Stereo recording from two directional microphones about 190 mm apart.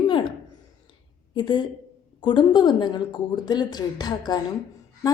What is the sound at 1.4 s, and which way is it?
A woman's voice, 25° left (ahead or behind).